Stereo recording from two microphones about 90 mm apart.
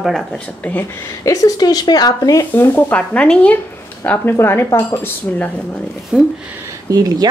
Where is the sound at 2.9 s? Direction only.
10° left (ahead or behind).